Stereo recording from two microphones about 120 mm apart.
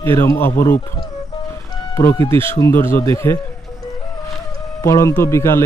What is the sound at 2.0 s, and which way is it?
Speech, 25° left (ahead or behind).